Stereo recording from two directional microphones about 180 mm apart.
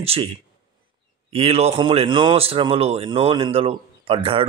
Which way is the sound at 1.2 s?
35° right (ahead or behind).